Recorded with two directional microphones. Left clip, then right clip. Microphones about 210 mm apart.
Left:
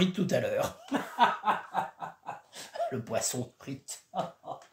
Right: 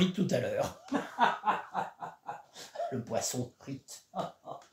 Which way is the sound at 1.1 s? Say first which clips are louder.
Left 3 dB; 45° left (ahead or behind).